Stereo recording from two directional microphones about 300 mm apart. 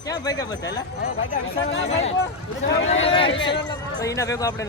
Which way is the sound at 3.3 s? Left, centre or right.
Left.